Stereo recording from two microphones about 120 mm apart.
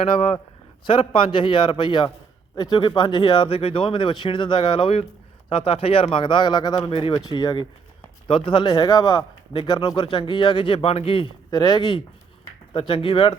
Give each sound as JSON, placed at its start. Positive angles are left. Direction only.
{"t": 0.9, "sound": "speech", "side_deg": 45}
{"t": 6.8, "sound": "speech", "side_deg": 50}
{"t": 7.3, "sound": "speech", "side_deg": 35}
{"t": 9.5, "sound": "speech", "side_deg": 40}
{"t": 11.5, "sound": "speech", "side_deg": 35}